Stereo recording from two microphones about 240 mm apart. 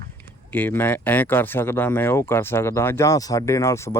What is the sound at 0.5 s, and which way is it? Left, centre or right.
Speech, centre.